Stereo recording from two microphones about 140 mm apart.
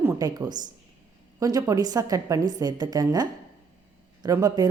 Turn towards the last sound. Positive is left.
turn(degrees=-25)  # may be behind; listen again after turning